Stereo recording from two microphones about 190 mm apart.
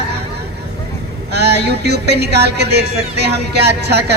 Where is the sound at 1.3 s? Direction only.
60° right (ahead or behind).